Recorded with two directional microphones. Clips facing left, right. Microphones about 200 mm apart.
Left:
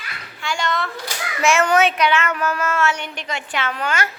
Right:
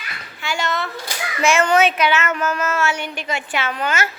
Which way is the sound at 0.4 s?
5° right (ahead or behind).